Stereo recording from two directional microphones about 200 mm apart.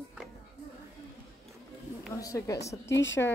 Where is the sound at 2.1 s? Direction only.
15° left (ahead or behind).